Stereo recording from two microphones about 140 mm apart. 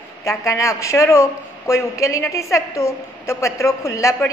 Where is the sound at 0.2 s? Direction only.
20° left (ahead or behind).